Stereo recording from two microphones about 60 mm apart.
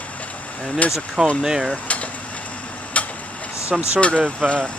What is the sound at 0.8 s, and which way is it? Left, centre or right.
Speech, left.